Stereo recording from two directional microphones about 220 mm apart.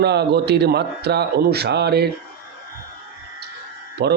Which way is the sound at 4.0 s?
45° right (ahead or behind).